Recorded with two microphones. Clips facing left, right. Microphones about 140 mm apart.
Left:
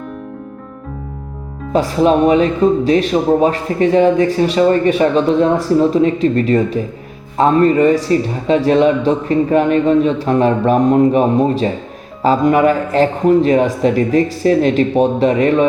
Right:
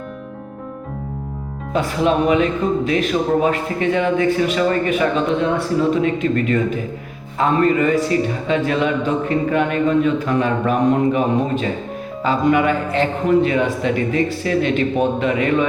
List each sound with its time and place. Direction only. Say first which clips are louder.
1.7 s speech: left 5 dB; 35° left (ahead or behind)